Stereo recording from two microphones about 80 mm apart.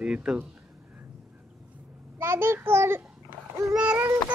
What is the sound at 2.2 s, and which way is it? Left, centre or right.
A child's voice, right.